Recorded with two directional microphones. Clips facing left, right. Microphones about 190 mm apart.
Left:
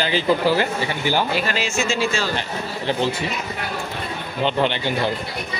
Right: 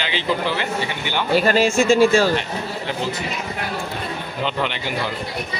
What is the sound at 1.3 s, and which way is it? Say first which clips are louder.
Speech: right 7 dB; 45° right (ahead or behind).